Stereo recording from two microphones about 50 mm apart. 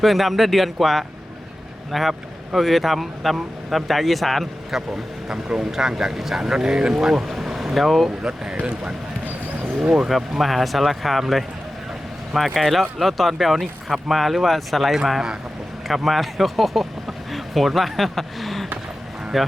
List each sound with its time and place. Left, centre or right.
0.0 s speech: centre
5.3 s speech: centre
8.2 s speech: centre
9.7 s speech: centre
12.5 s speech: centre